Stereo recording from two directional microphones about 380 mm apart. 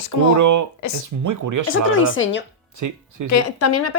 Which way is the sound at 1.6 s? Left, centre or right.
Left.